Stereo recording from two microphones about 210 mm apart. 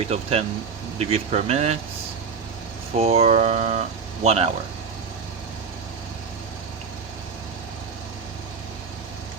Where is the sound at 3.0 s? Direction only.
30° right (ahead or behind).